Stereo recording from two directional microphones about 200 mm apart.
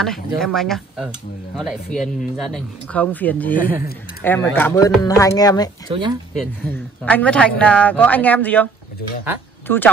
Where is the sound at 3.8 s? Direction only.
50° left (ahead or behind).